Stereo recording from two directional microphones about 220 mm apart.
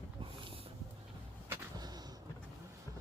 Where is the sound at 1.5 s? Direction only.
20° right (ahead or behind).